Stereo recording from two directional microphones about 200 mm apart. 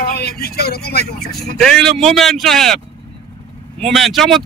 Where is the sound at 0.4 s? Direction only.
55° left (ahead or behind).